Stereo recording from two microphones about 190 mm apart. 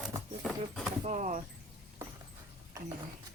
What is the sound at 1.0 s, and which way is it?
Speech, 40° right (ahead or behind).